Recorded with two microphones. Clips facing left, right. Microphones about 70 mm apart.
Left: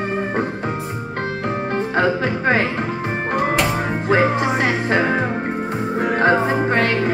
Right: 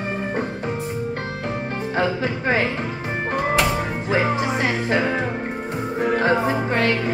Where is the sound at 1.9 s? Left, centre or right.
Left.